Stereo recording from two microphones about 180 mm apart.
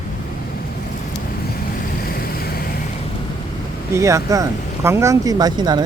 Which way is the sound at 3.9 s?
15° right (ahead or behind).